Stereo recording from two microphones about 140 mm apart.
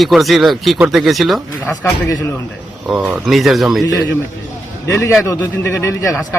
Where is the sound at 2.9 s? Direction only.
5° right (ahead or behind).